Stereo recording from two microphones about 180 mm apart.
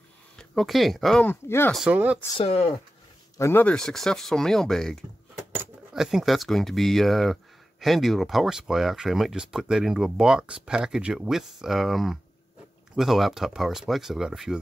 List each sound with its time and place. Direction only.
0.4 s speech: centre (ahead or behind)
1.7 s speech: 5° right (ahead or behind)
2.3 s speech: 30° left (ahead or behind)
3.3 s speech: 15° left (ahead or behind); by 14.6 s centre (ahead or behind)